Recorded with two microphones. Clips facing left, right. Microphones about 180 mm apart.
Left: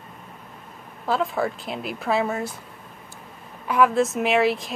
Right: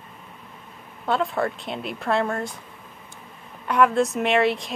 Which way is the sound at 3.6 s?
Centre (ahead or behind).